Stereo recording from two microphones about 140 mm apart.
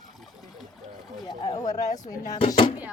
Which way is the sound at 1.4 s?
25° left (ahead or behind).